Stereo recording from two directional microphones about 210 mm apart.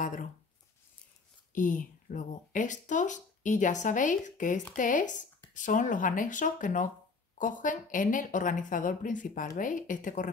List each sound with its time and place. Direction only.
0.0 s speech: 40° left (ahead or behind)
1.5 s speech: 40° left (ahead or behind)